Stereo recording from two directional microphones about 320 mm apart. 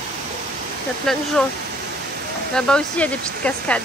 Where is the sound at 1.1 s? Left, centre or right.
Centre.